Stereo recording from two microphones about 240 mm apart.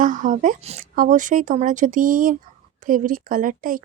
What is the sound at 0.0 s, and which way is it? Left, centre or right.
Speech, right.